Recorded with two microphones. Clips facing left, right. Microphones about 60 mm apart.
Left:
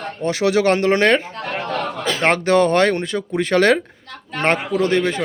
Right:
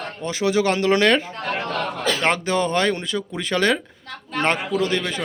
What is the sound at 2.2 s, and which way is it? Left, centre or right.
A man's voice, left.